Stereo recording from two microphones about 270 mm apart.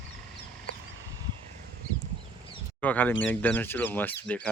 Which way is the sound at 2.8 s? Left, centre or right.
Centre.